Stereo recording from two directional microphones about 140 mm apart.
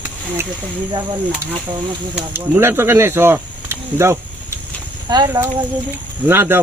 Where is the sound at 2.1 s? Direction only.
15° right (ahead or behind).